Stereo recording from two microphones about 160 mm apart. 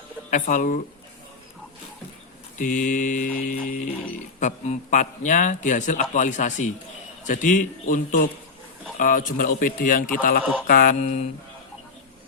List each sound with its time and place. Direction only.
0.3 s a man's voice: 50° left (ahead or behind)
2.6 s a man's voice: 55° left (ahead or behind)
11.0 s a man's voice: 45° left (ahead or behind)